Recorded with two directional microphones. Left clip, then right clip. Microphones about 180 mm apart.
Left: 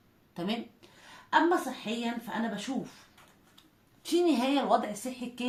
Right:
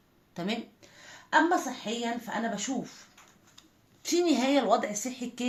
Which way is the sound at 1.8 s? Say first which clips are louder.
Right 2 dB; 35° right (ahead or behind).